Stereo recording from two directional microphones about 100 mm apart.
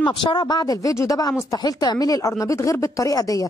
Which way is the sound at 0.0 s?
50° left (ahead or behind).